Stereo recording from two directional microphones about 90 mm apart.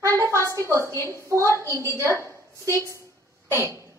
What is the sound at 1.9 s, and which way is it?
Speech, 35° right (ahead or behind).